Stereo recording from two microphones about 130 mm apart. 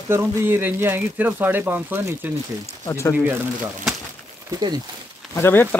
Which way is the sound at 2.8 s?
25° left (ahead or behind).